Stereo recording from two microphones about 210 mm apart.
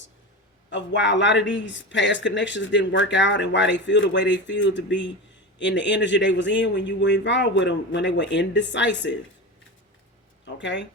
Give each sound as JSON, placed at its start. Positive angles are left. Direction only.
{"t": 0.7, "sound": "speech", "side_deg": 60}
{"t": 10.4, "sound": "speech", "side_deg": 60}